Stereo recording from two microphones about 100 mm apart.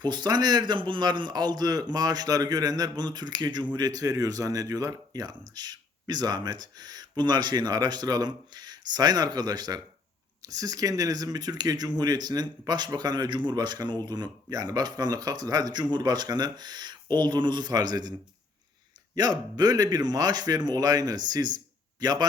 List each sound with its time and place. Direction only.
0.0 s speech: 45° right (ahead or behind)
19.1 s speech: 45° right (ahead or behind)